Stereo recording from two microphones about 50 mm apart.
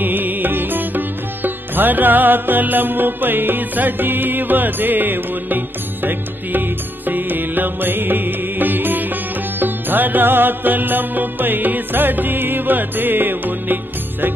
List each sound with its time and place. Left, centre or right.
0.0 s music: right
7.1 s music: right